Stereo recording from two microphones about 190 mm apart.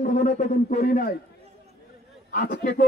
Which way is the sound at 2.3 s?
50° left (ahead or behind).